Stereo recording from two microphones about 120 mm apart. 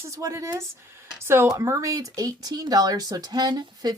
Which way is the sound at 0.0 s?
25° right (ahead or behind).